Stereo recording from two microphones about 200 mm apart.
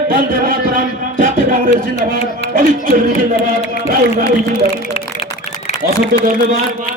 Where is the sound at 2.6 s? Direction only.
45° right (ahead or behind).